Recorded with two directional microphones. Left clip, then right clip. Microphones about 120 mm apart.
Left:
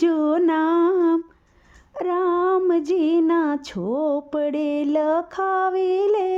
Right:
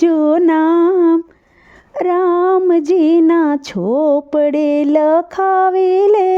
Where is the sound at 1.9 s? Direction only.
50° right (ahead or behind).